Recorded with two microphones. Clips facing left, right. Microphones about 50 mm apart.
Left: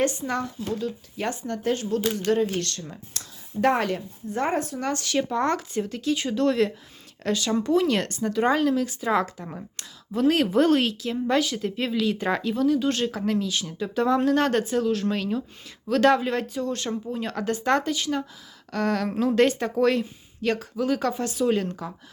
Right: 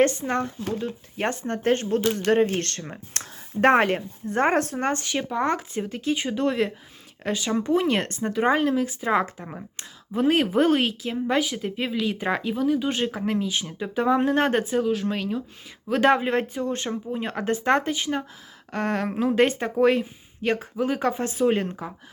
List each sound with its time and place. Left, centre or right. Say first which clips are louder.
0.0 s speech: right 4 dB; right
4.9 s speech: left 1 dB; right
15.9 s speech: even; right